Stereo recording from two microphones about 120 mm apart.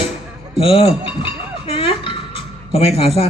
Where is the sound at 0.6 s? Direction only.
50° left (ahead or behind).